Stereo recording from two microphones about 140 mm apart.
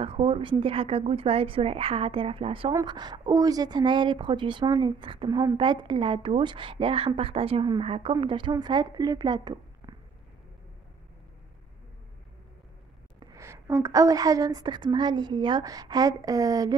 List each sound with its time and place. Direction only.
0.0 s a woman's voice: 40° right (ahead or behind)
5.3 s a woman's voice: 25° right (ahead or behind)
5.6 s a woman's voice: 35° right (ahead or behind)
13.2 s a woman's voice: 25° right (ahead or behind)